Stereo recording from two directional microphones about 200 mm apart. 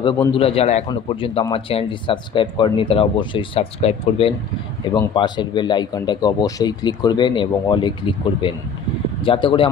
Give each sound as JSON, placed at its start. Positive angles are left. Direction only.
{"t": 0.0, "sound": "speech", "side_deg": 25}
{"t": 9.2, "sound": "speech", "side_deg": 25}